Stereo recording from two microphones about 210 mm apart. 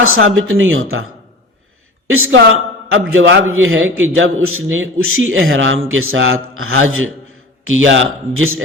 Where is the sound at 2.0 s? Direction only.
75° right (ahead or behind).